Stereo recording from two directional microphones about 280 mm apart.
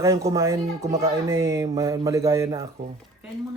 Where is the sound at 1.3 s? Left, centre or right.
Centre.